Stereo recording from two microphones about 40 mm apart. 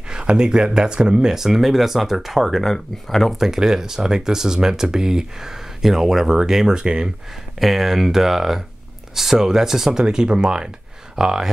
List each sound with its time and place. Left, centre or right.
0.1 s speech: right; by 2.6 s centre
2.6 s speech: centre
3.3 s speech: centre
7.6 s speech: centre
10.0 s speech: right